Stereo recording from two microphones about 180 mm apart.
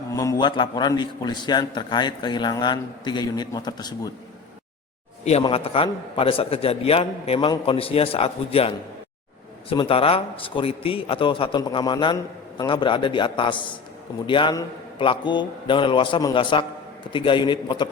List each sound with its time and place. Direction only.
0.2 s a man's voice: 20° left (ahead or behind)
5.4 s a man's voice: 30° left (ahead or behind)